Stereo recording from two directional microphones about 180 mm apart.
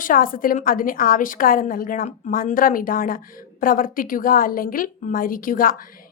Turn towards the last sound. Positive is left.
turn(degrees=50)  # may be behind; listen again after turning